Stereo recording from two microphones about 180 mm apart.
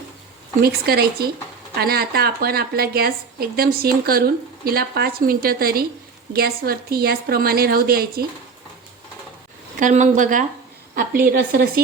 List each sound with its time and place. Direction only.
0.6 s a woman's voice: 60° right (ahead or behind)
9.7 s a woman's voice: 45° right (ahead or behind)